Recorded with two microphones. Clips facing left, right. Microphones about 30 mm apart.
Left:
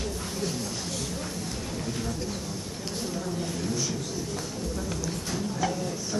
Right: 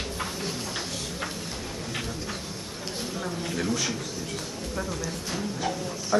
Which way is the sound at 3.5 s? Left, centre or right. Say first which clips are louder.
Right 6 dB; right.